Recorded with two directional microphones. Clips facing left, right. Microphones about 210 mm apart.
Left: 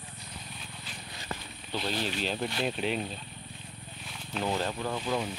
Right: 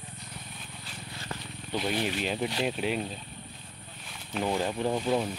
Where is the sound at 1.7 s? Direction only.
10° right (ahead or behind).